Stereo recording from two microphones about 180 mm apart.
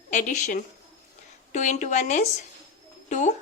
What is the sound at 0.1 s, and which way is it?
A woman's voice, 45° left (ahead or behind).